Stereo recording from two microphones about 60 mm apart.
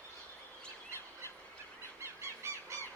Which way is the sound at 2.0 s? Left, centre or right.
Right.